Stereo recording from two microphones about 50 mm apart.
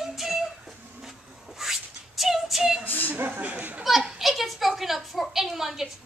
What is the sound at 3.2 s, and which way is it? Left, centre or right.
Speech, right.